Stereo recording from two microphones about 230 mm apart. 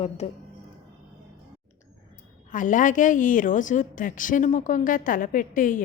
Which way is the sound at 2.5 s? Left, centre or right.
Left.